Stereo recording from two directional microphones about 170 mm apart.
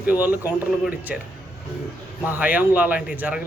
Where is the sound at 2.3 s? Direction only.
10° right (ahead or behind).